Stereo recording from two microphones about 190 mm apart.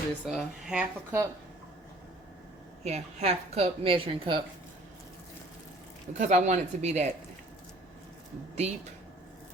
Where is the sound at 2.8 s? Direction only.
35° right (ahead or behind).